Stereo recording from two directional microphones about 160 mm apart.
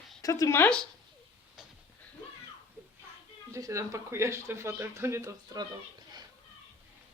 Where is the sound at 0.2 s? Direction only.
20° left (ahead or behind).